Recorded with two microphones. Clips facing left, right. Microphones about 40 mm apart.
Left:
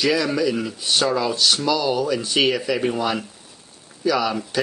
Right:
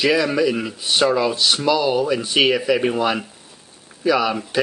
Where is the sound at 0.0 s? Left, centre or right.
Centre.